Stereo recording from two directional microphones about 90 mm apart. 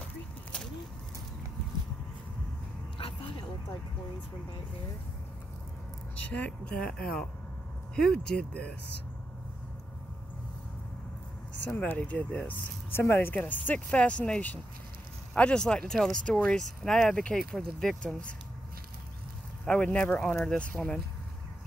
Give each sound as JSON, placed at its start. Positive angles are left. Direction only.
{"t": 3.0, "sound": "a sound", "side_deg": 75}
{"t": 6.3, "sound": "speech", "side_deg": 10}
{"t": 11.7, "sound": "speech", "side_deg": 20}
{"t": 19.6, "sound": "speech", "side_deg": 10}